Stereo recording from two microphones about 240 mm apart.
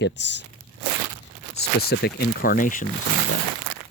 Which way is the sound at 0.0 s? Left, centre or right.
Left.